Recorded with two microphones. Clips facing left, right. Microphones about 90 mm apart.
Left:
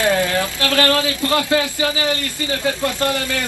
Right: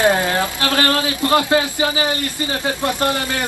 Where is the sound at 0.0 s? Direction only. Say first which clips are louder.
Right 1 dB; 30° right (ahead or behind).